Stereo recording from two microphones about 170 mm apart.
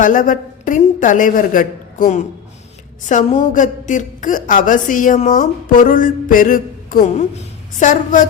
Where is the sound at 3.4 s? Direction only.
50° left (ahead or behind).